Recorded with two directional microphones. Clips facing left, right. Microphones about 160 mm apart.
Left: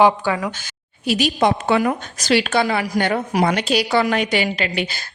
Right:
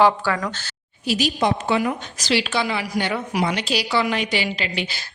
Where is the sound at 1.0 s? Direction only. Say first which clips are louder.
Left 3 dB; 60° left (ahead or behind).